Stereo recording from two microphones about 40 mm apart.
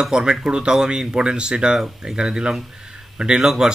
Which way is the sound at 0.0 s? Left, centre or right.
Centre.